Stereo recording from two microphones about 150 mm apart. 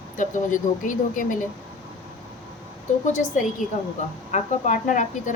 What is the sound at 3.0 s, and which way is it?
A woman's voice, 55° left (ahead or behind).